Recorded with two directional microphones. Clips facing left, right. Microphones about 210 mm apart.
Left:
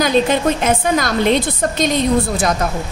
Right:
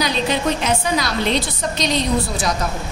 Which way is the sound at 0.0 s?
50° left (ahead or behind).